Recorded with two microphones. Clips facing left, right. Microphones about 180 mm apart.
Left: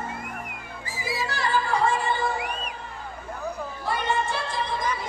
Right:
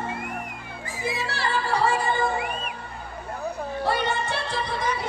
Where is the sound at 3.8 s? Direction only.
70° right (ahead or behind).